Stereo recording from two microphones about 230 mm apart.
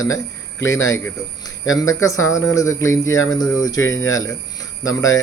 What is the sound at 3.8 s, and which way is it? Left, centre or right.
Speech, left.